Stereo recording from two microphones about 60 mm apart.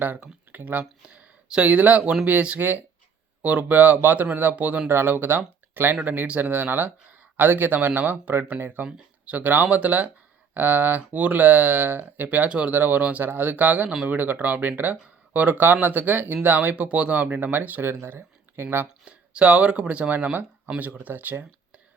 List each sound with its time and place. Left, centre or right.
0.5 s speech: right
1.0 s speech: centre; by 6.0 s right
6.0 s speech: right
12.5 s speech: right
17.8 s speech: right
19.0 s speech: centre